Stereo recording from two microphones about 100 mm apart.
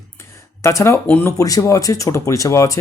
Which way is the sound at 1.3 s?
35° left (ahead or behind).